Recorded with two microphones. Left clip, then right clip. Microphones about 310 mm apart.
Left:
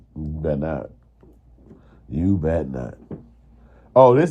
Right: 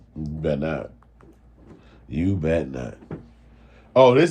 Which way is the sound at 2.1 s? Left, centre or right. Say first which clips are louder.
Left 1 dB; centre.